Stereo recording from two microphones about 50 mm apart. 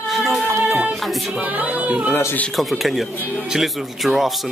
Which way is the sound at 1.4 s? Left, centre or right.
Right.